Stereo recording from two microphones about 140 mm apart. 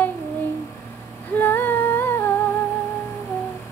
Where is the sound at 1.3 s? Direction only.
15° left (ahead or behind).